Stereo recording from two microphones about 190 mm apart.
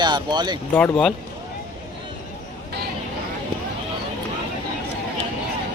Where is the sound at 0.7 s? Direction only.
10° left (ahead or behind).